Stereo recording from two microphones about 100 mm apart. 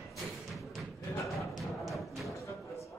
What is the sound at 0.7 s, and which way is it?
Music, centre (ahead or behind).